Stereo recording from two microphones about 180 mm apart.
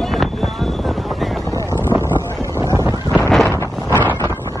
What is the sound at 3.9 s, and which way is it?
Wind noise, 15° left (ahead or behind).